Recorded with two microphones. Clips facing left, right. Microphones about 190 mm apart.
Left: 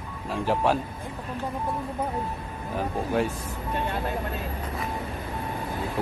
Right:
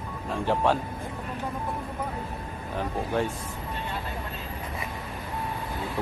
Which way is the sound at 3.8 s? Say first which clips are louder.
Left 7 dB; 55° left (ahead or behind).